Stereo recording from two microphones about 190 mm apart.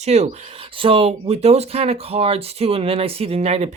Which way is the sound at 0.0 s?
35° right (ahead or behind).